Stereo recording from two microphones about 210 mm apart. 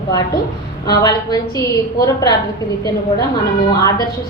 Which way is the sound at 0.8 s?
15° left (ahead or behind).